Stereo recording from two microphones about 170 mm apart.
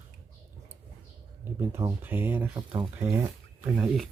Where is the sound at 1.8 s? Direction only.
15° right (ahead or behind).